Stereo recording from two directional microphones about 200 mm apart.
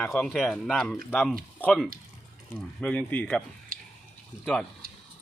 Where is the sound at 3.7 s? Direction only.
45° right (ahead or behind).